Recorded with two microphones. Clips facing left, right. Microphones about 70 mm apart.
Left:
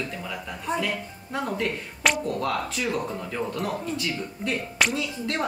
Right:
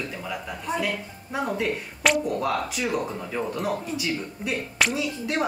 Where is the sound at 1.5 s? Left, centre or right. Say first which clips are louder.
Right 1 dB; centre.